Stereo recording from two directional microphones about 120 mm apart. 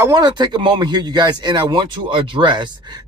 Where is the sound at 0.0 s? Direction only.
35° right (ahead or behind).